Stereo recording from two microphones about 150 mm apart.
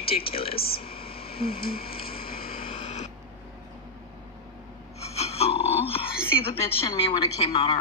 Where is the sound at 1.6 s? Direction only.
85° left.